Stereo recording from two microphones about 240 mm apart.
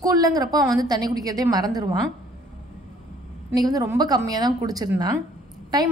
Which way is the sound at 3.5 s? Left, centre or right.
Centre.